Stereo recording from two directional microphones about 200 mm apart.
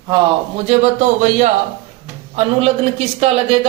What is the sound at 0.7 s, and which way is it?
Speech, 35° right (ahead or behind).